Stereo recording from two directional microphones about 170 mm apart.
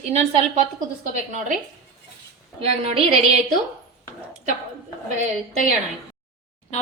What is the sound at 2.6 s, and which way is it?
Speech, 35° right (ahead or behind).